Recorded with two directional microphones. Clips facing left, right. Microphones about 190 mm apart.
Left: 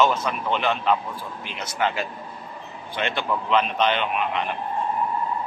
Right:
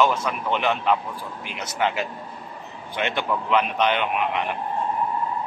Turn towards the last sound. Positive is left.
turn(degrees=-15)  # may be behind; listen again after turning